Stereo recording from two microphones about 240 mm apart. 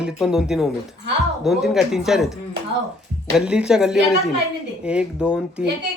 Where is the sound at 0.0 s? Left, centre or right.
Centre.